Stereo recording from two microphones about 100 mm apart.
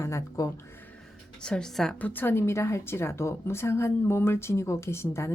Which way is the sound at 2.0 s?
20° left (ahead or behind).